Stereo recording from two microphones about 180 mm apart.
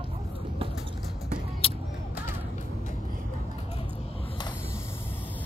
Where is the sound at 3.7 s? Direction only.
30° left (ahead or behind).